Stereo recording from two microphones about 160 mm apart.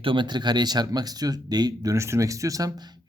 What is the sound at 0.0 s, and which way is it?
Speech, 30° right (ahead or behind).